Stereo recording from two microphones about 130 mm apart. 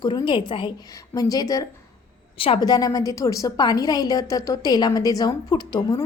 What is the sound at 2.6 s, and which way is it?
A woman's voice, 30° left (ahead or behind).